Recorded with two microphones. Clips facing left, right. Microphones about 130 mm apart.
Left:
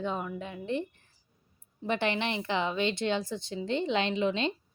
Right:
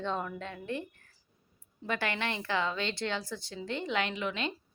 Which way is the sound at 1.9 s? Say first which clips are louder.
Left 4 dB; 20° left (ahead or behind).